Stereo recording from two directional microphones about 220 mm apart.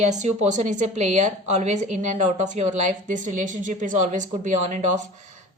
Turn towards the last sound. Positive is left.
turn(degrees=-35)  # may be behind; listen again after turning